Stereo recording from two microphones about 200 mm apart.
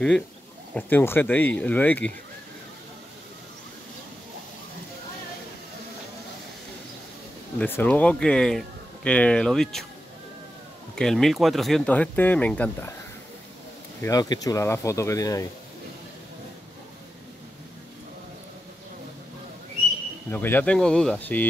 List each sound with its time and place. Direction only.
0.7 s speech: 10° left (ahead or behind)
7.5 s speech: 10° left (ahead or behind)
11.0 s speech: centre (ahead or behind)
14.0 s speech: 20° left (ahead or behind)
20.2 s speech: 10° left (ahead or behind)